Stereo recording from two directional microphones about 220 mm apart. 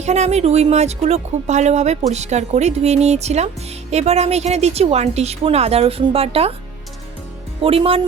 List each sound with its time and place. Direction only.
0.0 s speech: 30° right (ahead or behind)
7.6 s speech: 25° right (ahead or behind)